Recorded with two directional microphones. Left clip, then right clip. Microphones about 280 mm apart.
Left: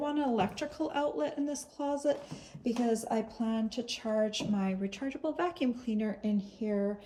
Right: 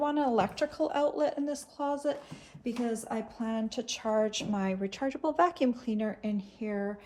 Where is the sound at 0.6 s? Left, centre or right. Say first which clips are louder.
Right 7 dB; right.